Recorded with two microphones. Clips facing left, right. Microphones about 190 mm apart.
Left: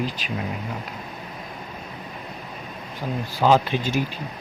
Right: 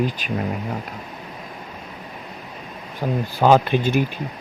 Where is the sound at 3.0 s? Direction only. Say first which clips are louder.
Right 3 dB; 55° right (ahead or behind).